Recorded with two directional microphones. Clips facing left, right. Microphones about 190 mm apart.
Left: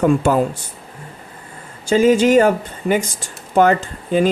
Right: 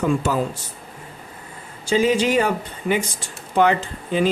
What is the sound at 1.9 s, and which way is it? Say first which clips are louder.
Speech: left 6 dB; 45° left (ahead or behind).